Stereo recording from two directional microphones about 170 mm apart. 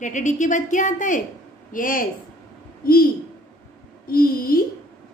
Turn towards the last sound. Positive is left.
turn(degrees=60)  # may be behind; listen again after turning